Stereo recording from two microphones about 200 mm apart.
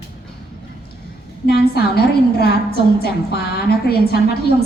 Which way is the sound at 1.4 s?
50° left (ahead or behind).